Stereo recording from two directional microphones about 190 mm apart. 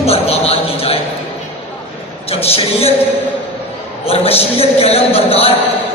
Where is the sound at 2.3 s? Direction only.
30° left (ahead or behind).